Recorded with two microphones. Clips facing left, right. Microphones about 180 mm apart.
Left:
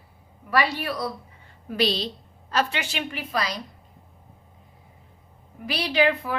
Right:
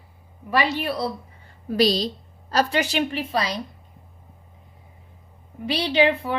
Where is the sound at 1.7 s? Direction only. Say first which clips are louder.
Right 5 dB; 40° right (ahead or behind).